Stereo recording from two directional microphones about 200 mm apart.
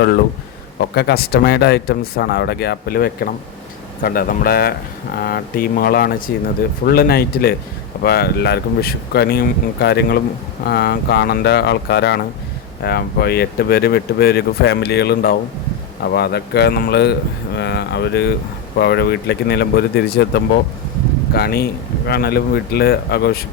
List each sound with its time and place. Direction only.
0.9 s speech: 55° left (ahead or behind)